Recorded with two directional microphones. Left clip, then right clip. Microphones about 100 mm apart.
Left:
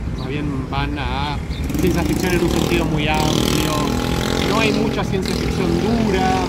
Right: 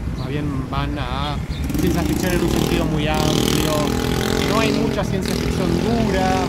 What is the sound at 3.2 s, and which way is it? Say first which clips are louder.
Speech: left 1 dB; centre (ahead or behind).